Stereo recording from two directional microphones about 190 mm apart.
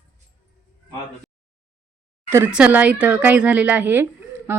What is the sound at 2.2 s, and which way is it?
Speech, 15° right (ahead or behind).